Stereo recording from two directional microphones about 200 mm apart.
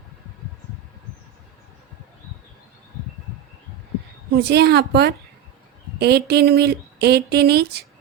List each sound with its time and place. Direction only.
4.3 s a woman's voice: 55° right (ahead or behind)